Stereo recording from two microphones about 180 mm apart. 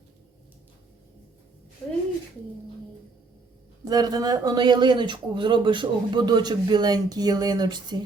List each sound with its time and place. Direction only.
3.8 s speech: 20° right (ahead or behind)